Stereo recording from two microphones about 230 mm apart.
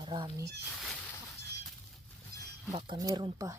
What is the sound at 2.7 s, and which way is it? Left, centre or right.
Speech, centre.